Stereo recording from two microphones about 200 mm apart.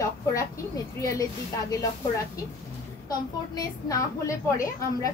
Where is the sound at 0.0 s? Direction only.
15° left (ahead or behind).